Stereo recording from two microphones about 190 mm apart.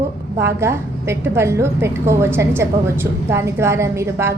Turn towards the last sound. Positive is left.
turn(degrees=-15)  # may be behind; listen again after turning